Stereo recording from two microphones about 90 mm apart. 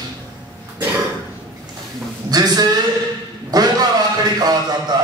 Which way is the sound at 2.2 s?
45° right (ahead or behind).